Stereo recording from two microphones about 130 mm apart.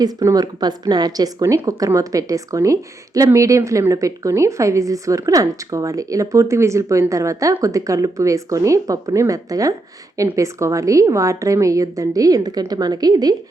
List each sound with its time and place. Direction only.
0.0 s a woman's voice: 25° right (ahead or behind)